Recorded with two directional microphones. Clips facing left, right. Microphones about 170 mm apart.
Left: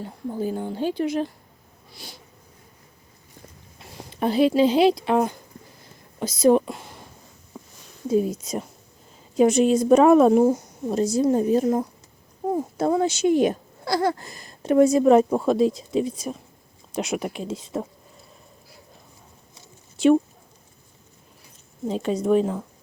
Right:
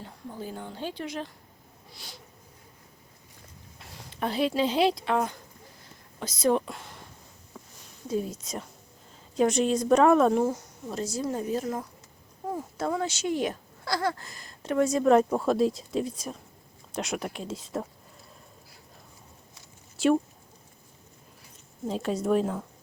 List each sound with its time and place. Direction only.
0.6 s speech: 10° left (ahead or behind)
4.2 s speech: 5° left (ahead or behind)
6.1 s speech: 10° left (ahead or behind)
7.5 s a sound: 15° left (ahead or behind)
8.1 s a woman's voice: 10° left (ahead or behind)
20.0 s speech: centre (ahead or behind)
21.8 s speech: centre (ahead or behind)